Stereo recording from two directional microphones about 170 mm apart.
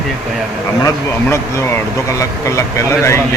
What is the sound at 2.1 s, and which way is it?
Speech, 15° left (ahead or behind).